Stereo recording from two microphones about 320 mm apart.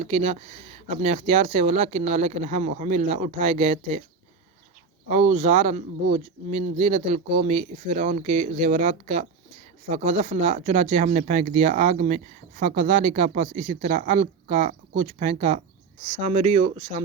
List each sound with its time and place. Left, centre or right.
0.0 s speech: right
5.0 s speech: right